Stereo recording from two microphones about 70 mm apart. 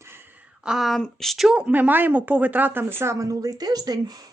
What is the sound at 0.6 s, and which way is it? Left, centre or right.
Speech, centre.